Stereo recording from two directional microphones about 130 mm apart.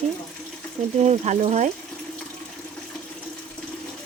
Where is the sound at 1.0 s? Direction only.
60° right (ahead or behind).